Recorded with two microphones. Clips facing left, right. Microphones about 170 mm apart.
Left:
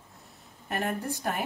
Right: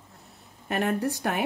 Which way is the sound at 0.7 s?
75° right (ahead or behind).